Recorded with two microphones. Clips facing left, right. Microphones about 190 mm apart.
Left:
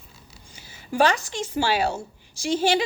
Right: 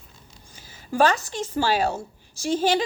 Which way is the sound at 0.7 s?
15° left (ahead or behind).